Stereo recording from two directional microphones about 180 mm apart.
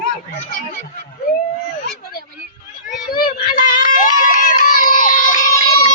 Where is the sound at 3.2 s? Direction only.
50° left (ahead or behind).